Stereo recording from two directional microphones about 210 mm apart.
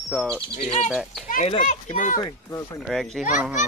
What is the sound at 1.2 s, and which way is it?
Speech, 35° left (ahead or behind).